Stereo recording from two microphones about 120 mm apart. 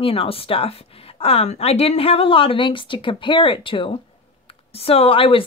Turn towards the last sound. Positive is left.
turn(degrees=50)  # may be behind; listen again after turning